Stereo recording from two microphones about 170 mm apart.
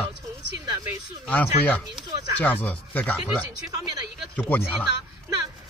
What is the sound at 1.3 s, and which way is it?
Speech, 10° left (ahead or behind).